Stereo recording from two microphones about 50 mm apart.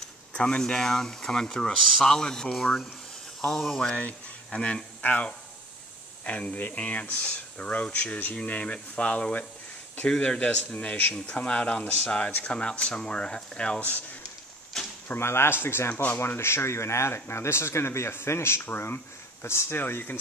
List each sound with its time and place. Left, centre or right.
0.3 s speech: centre
3.9 s speech: left
13.7 s speech: left
14.7 s a sound: centre
15.1 s speech: left
15.9 s speech: left
19.7 s speech: left